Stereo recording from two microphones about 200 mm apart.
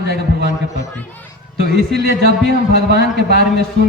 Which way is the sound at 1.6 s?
55° right (ahead or behind).